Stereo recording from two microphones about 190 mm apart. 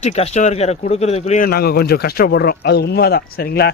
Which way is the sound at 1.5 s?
55° left (ahead or behind).